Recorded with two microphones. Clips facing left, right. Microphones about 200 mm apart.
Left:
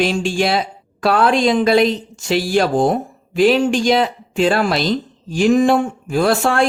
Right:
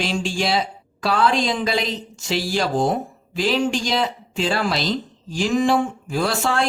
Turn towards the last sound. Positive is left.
turn(degrees=60)  # may be behind; listen again after turning